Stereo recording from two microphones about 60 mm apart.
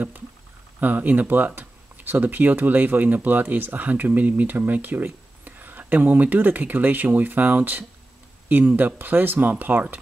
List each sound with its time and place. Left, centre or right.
0.7 s speech: right